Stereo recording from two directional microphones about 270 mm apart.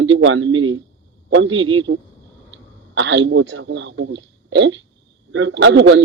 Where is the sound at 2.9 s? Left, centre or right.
Right.